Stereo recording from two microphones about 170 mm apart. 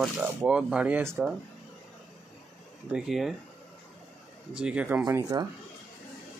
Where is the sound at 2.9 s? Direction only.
5° right (ahead or behind).